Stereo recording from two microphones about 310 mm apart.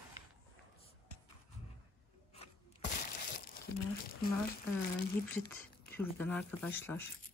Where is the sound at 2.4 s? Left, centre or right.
Left.